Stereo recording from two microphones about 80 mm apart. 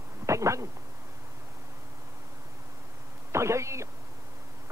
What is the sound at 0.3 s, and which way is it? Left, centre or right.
Speech, right.